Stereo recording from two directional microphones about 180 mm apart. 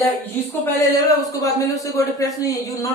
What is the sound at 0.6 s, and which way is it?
A man's voice, 20° left (ahead or behind).